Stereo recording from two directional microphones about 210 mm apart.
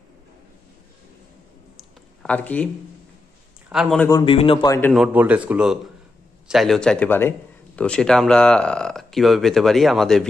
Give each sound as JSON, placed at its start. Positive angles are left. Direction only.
{"t": 2.2, "sound": "a man's voice", "side_deg": 5}
{"t": 4.0, "sound": "a man's voice", "side_deg": 20}
{"t": 4.9, "sound": "speech", "side_deg": -5}